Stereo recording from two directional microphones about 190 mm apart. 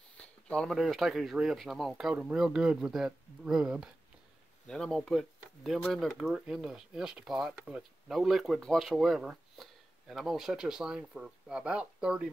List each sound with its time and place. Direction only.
0.2 s speech: 5° left (ahead or behind)